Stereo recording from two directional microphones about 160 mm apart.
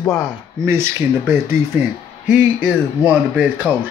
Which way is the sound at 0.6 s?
15° right (ahead or behind).